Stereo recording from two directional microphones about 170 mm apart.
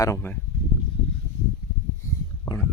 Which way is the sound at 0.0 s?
15° left (ahead or behind).